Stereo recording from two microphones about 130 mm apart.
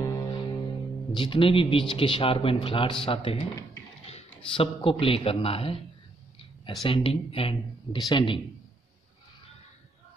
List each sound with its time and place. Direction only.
0.0 s music: 25° left (ahead or behind)
0.3 s music: 35° left (ahead or behind)
1.1 s a man's voice: 40° left (ahead or behind)
4.6 s a man's voice: 45° left (ahead or behind)